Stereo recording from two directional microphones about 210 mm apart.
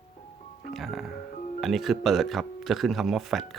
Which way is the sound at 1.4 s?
35° left (ahead or behind).